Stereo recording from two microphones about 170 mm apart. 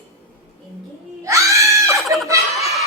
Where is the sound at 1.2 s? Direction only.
20° right (ahead or behind).